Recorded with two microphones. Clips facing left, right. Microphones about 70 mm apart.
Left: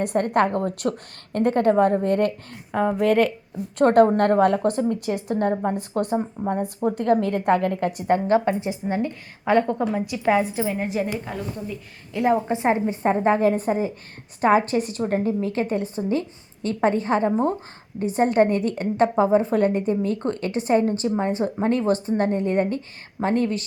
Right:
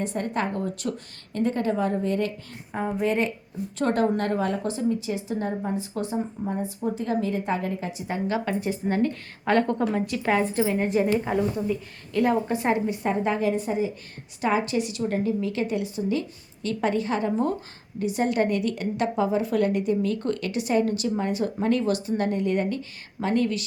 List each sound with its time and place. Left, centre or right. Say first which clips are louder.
0.0 s a woman's voice: left 7 dB; left
2.7 s a woman's voice: left 6 dB; left
3.8 s a woman's voice: left 8 dB; left
8.4 s a woman's voice: left 2 dB; centre
11.3 s speech: right 6 dB; centre
12.1 s a woman's voice: left 2 dB; centre